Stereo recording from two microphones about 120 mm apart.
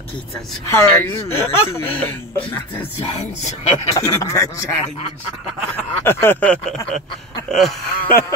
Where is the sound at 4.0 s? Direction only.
25° left (ahead or behind).